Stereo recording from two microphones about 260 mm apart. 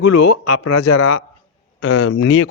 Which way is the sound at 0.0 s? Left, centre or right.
Left.